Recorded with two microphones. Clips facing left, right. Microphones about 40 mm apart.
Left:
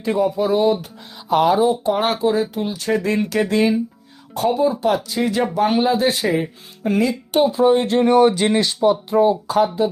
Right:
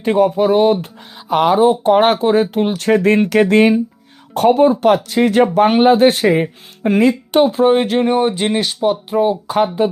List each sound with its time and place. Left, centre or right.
0.0 s speech: right
7.9 s speech: right
8.8 s speech: right
9.6 s speech: right